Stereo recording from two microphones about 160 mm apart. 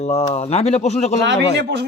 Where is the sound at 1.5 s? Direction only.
90° right.